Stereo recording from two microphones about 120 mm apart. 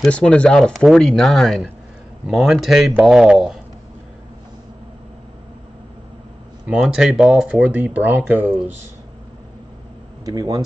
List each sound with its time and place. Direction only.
0.0 s speech: 10° left (ahead or behind)
6.7 s speech: 5° right (ahead or behind)
10.2 s speech: 35° right (ahead or behind)